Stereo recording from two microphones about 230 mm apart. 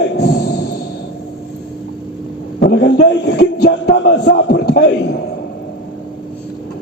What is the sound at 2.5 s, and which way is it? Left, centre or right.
A man's voice, left.